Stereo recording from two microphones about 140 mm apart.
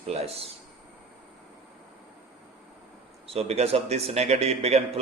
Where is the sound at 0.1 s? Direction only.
45° right (ahead or behind).